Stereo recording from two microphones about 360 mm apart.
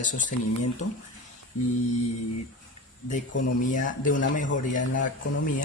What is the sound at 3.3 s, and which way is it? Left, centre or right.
Speech, left.